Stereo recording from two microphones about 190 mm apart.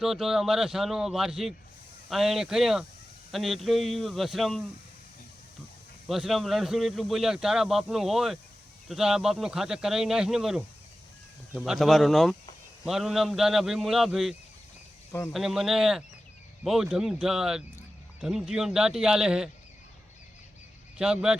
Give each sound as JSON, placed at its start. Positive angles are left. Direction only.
{"t": 0.0, "sound": "speech", "side_deg": 0}
{"t": 6.1, "sound": "speech", "side_deg": 0}
{"t": 21.0, "sound": "speech", "side_deg": -5}